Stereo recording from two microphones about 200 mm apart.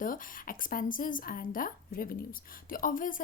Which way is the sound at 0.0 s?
45° left (ahead or behind).